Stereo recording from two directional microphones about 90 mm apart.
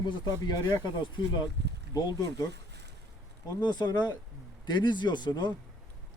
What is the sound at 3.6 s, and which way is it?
Speech, 55° left (ahead or behind).